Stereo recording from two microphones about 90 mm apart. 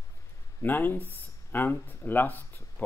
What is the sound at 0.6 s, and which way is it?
Speech, 20° left (ahead or behind).